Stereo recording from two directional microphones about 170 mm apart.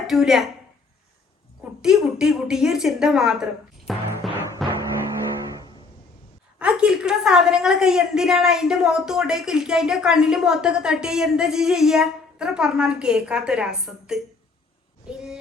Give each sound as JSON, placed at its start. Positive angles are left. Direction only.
{"t": 0.1, "sound": "a woman's voice", "side_deg": 0}
{"t": 1.8, "sound": "a woman's voice", "side_deg": -5}
{"t": 4.4, "sound": "music", "side_deg": -20}
{"t": 6.6, "sound": "a woman's voice", "side_deg": -5}